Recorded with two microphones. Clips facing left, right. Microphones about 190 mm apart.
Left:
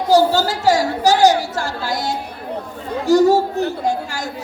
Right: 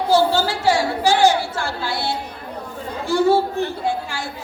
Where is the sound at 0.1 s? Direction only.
40° left (ahead or behind).